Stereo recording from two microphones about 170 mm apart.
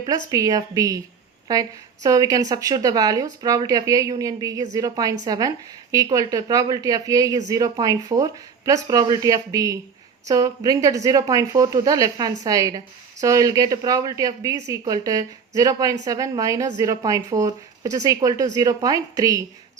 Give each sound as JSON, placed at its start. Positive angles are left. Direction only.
{"t": 0.0, "sound": "a woman's voice", "side_deg": -20}